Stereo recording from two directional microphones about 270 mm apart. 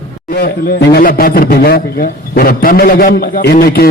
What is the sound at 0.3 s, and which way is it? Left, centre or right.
A man's voice, left.